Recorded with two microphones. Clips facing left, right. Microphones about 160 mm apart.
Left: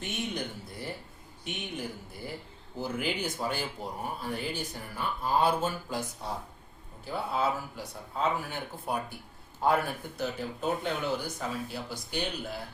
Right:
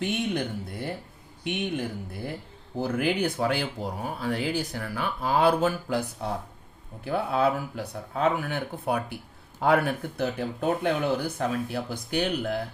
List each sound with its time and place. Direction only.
1.5 s speech: 65° right (ahead or behind)